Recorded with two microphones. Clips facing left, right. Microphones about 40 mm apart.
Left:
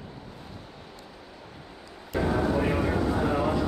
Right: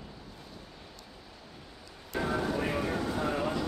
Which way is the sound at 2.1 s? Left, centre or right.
Centre.